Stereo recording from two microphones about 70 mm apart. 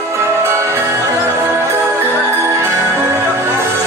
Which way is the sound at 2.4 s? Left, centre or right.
Right.